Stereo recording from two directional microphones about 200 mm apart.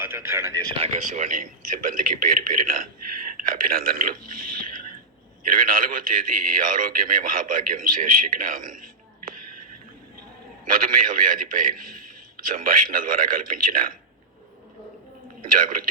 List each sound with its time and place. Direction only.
0.0 s speech: 10° right (ahead or behind)
0.7 s a man's voice: 35° right (ahead or behind)
10.7 s a man's voice: 45° right (ahead or behind)
15.4 s speech: 45° right (ahead or behind)